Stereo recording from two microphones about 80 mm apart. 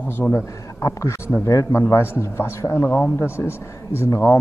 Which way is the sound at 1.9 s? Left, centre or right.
Left.